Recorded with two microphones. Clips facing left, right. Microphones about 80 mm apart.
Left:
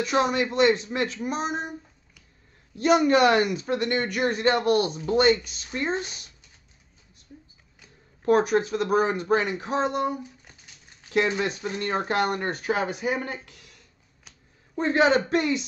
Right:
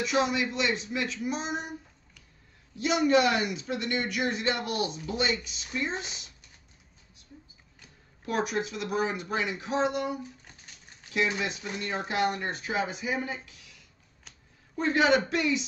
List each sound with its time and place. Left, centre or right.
0.0 s a man's voice: left
2.8 s a man's voice: left
8.3 s a man's voice: left
11.1 s a man's voice: left
14.8 s a man's voice: left